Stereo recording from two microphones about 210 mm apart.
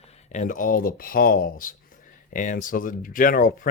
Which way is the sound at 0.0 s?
30° left (ahead or behind).